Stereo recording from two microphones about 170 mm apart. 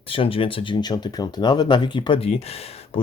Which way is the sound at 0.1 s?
30° left (ahead or behind).